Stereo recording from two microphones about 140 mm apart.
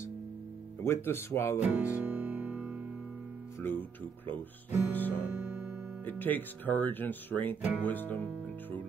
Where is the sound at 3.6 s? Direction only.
15° left (ahead or behind).